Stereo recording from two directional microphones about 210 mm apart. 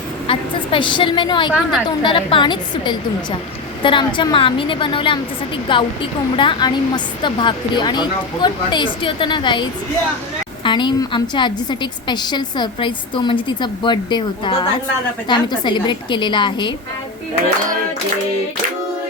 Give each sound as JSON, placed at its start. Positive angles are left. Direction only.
{"t": 0.3, "sound": "a woman's voice", "side_deg": 25}
{"t": 1.5, "sound": "a woman's voice", "side_deg": 0}
{"t": 1.9, "sound": "a woman's voice", "side_deg": 25}